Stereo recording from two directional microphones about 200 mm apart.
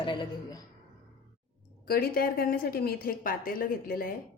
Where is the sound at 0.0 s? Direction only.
25° left (ahead or behind).